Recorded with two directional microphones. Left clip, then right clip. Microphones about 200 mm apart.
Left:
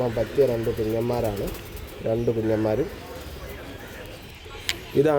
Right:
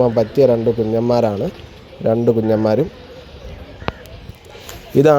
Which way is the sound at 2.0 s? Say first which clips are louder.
Right 9 dB; 30° right (ahead or behind).